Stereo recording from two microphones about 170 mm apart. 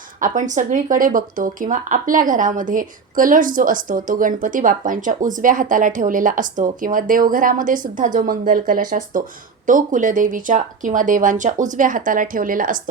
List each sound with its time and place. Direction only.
0.2 s speech: 45° right (ahead or behind)